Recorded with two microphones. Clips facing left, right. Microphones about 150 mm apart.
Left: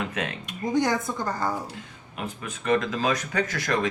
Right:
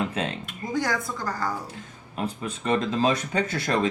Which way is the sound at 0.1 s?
30° right (ahead or behind).